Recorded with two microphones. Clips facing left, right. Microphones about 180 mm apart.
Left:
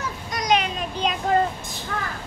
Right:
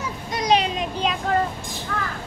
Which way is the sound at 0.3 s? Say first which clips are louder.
Right 2 dB; 30° right (ahead or behind).